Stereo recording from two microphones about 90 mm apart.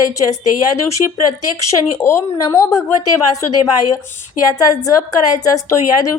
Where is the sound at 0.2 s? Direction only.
40° left (ahead or behind).